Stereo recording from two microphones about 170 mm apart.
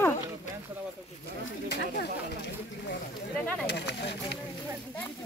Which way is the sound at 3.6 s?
80° left.